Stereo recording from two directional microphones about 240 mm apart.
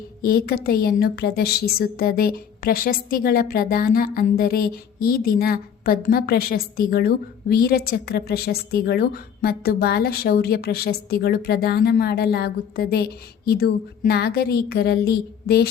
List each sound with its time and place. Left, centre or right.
0.2 s a woman's voice: left